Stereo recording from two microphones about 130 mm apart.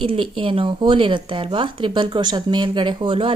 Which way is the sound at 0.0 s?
40° right (ahead or behind).